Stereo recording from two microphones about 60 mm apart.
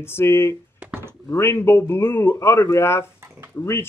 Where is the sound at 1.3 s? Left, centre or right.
Left.